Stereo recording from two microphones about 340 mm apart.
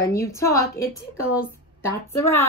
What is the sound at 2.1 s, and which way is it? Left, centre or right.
Speech, centre.